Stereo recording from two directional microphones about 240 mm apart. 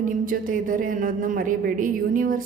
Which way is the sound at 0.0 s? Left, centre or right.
Right.